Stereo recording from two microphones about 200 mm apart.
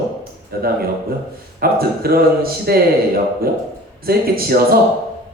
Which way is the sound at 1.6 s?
50° right (ahead or behind).